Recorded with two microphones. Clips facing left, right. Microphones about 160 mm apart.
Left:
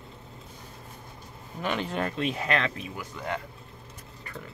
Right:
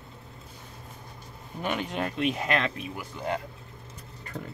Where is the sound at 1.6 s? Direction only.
15° right (ahead or behind).